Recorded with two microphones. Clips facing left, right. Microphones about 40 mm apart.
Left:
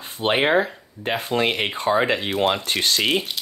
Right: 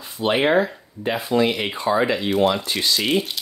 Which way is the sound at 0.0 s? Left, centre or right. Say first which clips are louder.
Right 1 dB; left.